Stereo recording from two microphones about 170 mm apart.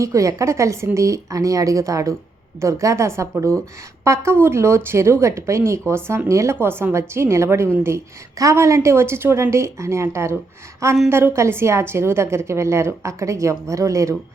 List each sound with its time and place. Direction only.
0.0 s a woman's voice: 20° right (ahead or behind)